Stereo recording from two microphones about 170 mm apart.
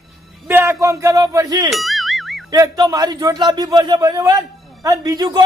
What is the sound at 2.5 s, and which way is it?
A man's voice, 20° right (ahead or behind).